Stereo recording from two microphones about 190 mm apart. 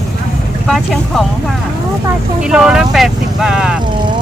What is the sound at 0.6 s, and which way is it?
Speech, centre (ahead or behind).